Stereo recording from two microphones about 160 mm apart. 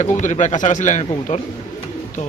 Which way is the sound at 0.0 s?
50° left (ahead or behind).